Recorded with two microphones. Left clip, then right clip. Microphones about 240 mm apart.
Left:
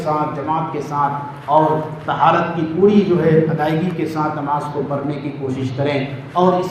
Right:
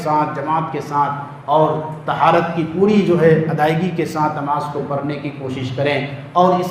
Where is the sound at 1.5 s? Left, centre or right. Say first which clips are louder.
Even; right.